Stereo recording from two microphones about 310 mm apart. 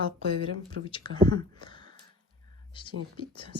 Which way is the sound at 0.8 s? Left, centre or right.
Centre.